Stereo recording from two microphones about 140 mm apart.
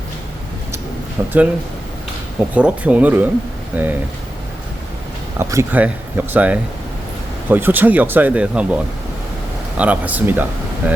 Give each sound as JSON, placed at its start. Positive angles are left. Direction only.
{"t": 1.2, "sound": "speech", "side_deg": -15}
{"t": 2.6, "sound": "speech", "side_deg": -10}
{"t": 5.4, "sound": "speech", "side_deg": -20}